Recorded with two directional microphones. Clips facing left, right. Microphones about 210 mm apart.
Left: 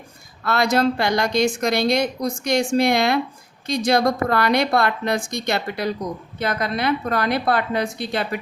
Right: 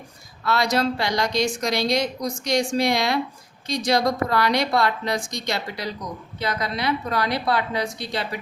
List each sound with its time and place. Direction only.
0.4 s a woman's voice: 55° left (ahead or behind)